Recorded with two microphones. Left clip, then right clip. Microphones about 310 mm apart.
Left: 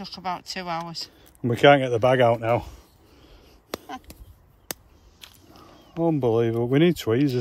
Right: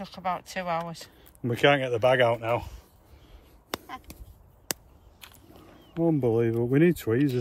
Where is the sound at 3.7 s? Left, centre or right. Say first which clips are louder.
Left 2 dB; centre.